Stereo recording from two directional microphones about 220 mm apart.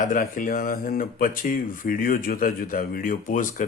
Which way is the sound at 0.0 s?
35° left (ahead or behind).